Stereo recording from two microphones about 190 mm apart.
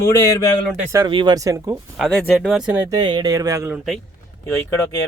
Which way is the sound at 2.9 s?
20° right (ahead or behind).